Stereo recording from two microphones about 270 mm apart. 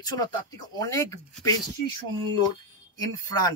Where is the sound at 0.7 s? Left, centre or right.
Centre.